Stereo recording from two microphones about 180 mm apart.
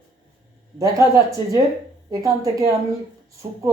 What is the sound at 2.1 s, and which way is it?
Speech, 20° right (ahead or behind).